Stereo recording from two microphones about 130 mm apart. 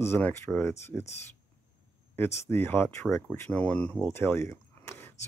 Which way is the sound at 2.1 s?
20° left (ahead or behind).